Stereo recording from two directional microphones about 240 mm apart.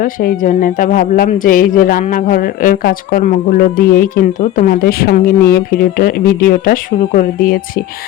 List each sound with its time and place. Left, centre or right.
0.0 s speech: left